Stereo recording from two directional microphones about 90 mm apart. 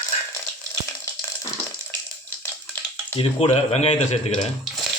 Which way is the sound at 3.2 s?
90° left.